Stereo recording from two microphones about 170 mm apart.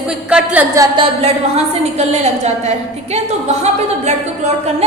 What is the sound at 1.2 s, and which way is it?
A woman's voice, 40° right (ahead or behind).